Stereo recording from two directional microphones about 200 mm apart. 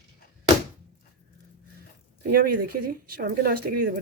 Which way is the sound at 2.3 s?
50° right (ahead or behind).